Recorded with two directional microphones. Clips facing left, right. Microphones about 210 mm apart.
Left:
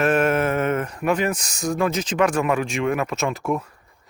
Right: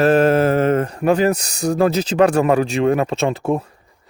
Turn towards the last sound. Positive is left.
turn(degrees=-30)  # may be behind; listen again after turning